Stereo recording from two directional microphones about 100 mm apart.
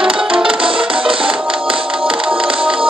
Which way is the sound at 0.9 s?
60° right (ahead or behind).